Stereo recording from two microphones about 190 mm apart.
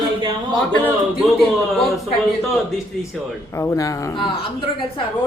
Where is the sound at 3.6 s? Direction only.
15° left (ahead or behind).